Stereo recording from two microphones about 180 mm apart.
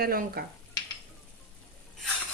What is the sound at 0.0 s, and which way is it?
Frying, 55° right (ahead or behind).